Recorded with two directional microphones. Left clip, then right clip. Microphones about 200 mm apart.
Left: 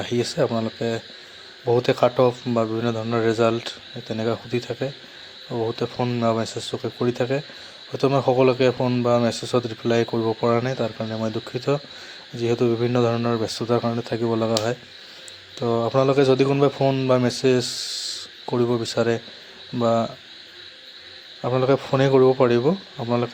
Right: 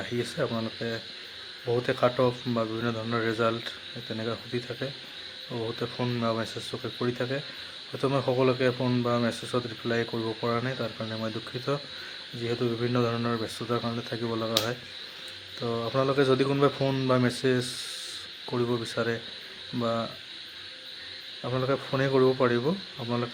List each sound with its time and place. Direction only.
0.0 s speech: 30° left (ahead or behind)
5.5 s speech: 15° left (ahead or behind)
21.4 s speech: 25° left (ahead or behind)